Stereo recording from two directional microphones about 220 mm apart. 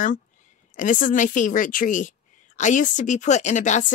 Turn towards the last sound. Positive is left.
turn(degrees=30)  # may be behind; listen again after turning